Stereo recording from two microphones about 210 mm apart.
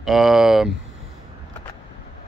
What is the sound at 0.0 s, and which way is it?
Speech, centre (ahead or behind).